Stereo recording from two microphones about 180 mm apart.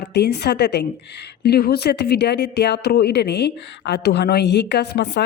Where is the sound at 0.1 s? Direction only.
65° left (ahead or behind).